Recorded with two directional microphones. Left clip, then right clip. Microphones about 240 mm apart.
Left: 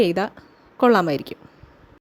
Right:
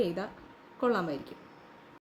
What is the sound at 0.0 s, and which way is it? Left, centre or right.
A woman's voice, left.